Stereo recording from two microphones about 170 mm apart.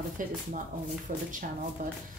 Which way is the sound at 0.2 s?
50° right (ahead or behind).